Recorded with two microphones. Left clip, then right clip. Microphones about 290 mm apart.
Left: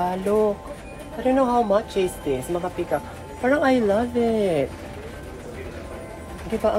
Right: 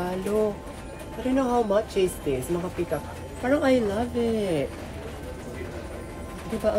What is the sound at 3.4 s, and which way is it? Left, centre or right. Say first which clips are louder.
A woman's voice: left 3 dB; left.